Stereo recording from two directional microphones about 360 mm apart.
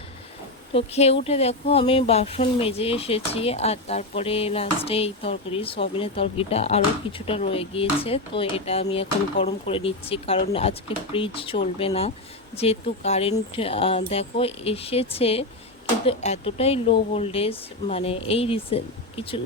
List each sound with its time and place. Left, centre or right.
0.7 s speech: centre